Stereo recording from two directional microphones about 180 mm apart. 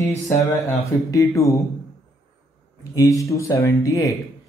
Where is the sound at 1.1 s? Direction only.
20° left (ahead or behind).